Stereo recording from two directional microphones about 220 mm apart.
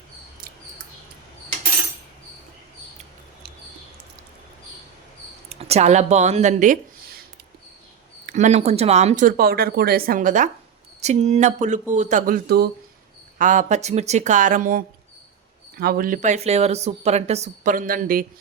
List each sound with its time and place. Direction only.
5.5 s speech: 30° right (ahead or behind)
8.3 s speech: 35° right (ahead or behind)
13.4 s speech: 35° right (ahead or behind)